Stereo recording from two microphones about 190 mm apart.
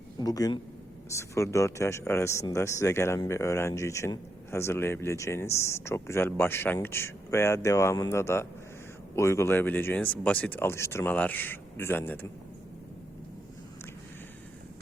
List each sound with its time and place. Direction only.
0.2 s a man's voice: 20° left (ahead or behind)